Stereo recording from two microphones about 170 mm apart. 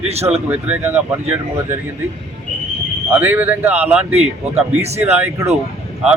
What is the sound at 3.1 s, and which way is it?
Speech, 10° right (ahead or behind).